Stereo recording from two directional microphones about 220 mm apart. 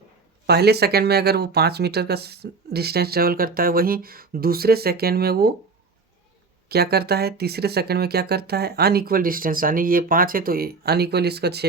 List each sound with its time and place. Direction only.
0.4 s speech: 45° right (ahead or behind)
6.7 s speech: 45° right (ahead or behind)